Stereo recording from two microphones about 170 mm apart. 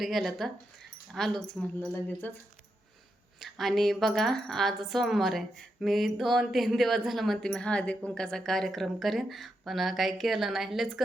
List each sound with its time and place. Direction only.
0.0 s a woman's voice: centre (ahead or behind)
3.4 s a woman's voice: centre (ahead or behind)